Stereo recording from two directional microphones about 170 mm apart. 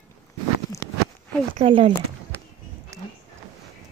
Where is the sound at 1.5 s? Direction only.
35° right (ahead or behind).